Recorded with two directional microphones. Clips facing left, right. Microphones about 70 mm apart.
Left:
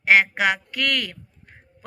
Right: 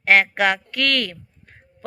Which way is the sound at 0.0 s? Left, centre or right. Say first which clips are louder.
Right 1 dB; centre.